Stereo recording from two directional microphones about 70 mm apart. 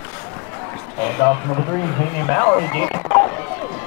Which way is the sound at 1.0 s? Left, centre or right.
Left.